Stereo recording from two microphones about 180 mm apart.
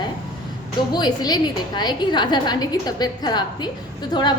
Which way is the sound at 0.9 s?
20° left (ahead or behind).